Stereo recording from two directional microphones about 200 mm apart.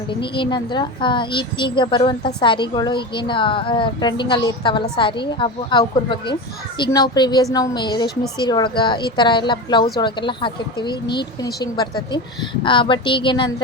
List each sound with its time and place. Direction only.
0.1 s a woman's voice: 25° left (ahead or behind)